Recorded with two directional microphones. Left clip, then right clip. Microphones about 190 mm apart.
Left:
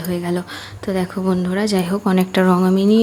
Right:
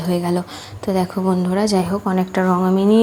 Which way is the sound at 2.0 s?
25° left (ahead or behind).